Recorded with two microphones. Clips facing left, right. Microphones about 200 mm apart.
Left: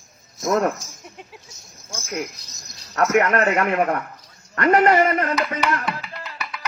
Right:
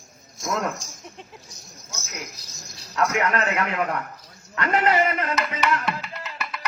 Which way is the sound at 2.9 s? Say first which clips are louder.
Left 5 dB; 45° left (ahead or behind).